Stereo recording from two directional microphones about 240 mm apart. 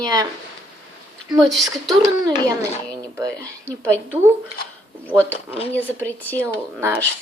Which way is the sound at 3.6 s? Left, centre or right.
Centre.